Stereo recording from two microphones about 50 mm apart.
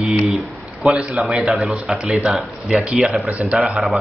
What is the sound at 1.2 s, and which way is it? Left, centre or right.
Speech, centre.